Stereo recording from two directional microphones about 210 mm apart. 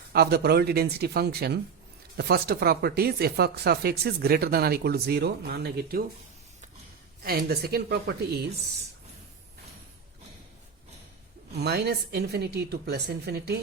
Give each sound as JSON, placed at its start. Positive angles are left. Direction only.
{"t": 0.1, "sound": "speech", "side_deg": -50}
{"t": 7.2, "sound": "speech", "side_deg": -45}
{"t": 11.5, "sound": "speech", "side_deg": -50}